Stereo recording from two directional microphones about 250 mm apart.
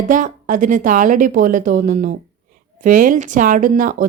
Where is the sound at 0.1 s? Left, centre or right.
Right.